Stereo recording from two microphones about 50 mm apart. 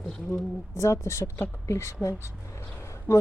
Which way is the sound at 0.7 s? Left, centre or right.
Left.